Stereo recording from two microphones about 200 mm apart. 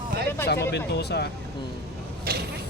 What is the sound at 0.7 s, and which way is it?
Speech, 55° left (ahead or behind).